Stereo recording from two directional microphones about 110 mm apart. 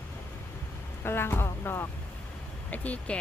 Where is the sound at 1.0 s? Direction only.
20° left (ahead or behind).